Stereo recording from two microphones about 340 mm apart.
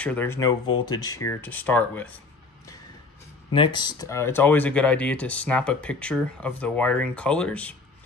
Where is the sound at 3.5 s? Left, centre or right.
Centre.